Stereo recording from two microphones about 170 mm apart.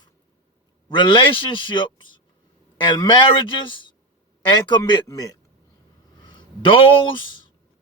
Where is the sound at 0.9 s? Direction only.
30° left (ahead or behind).